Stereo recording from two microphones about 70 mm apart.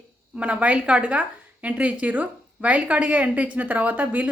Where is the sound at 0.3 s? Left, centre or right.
Centre.